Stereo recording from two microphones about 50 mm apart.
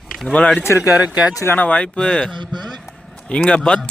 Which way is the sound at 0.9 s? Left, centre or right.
Right.